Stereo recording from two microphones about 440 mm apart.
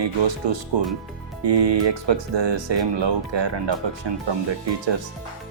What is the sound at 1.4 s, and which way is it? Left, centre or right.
Speech, right.